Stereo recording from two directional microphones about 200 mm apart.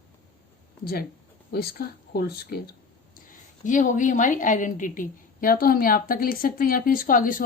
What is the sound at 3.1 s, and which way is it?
A woman's voice, 40° left (ahead or behind).